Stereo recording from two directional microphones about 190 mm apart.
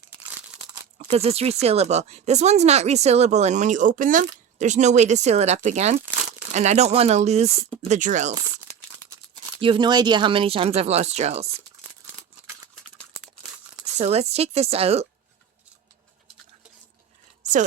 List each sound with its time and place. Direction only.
0.9 s speech: 35° right (ahead or behind)
9.6 s speech: 25° right (ahead or behind)
14.0 s speech: 35° right (ahead or behind)